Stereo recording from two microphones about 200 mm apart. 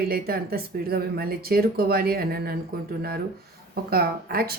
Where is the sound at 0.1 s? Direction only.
50° right (ahead or behind).